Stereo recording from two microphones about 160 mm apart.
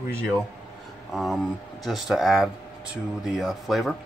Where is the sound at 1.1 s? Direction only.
Centre (ahead or behind).